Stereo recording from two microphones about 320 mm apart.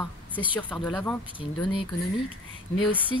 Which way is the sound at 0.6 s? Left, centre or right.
Centre.